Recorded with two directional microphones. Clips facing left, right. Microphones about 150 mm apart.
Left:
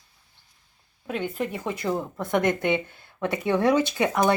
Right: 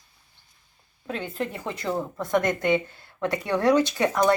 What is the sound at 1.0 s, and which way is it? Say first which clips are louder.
Speech: left 2 dB; 5° left (ahead or behind).